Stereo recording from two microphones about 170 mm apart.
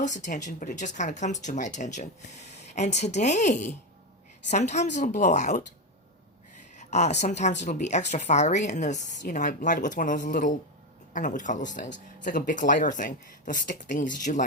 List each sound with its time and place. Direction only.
0.0 s speech: 45° left (ahead or behind)
6.7 s a woman's voice: 40° left (ahead or behind)